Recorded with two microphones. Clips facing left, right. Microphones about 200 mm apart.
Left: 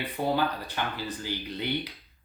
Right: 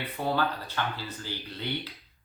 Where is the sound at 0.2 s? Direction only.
15° left (ahead or behind).